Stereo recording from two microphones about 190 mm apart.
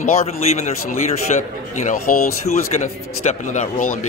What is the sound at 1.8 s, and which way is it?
Speech, 45° left (ahead or behind).